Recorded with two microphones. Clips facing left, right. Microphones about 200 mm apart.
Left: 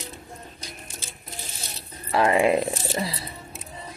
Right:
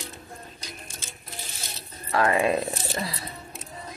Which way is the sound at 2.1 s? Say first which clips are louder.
Left 3 dB; 20° left (ahead or behind).